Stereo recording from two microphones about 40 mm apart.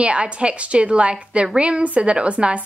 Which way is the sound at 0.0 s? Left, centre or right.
Right.